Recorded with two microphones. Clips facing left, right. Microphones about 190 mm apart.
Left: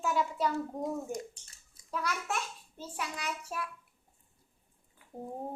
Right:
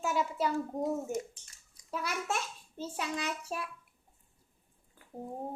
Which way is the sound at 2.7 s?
25° right (ahead or behind).